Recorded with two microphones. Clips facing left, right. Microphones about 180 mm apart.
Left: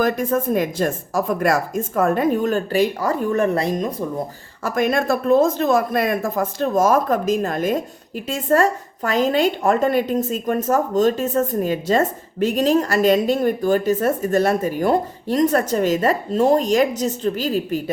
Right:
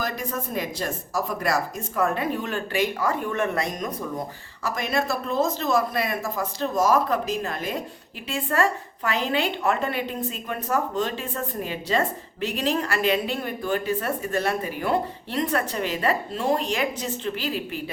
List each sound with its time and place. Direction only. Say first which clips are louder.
0.0 s a woman's voice: left 10 dB; 50° left (ahead or behind); by 3.9 s 30° left (ahead or behind)
4.6 s a woman's voice: left 7 dB; 50° left (ahead or behind)